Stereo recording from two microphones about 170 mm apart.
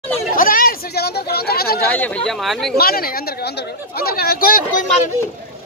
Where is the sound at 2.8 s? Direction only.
60° left (ahead or behind).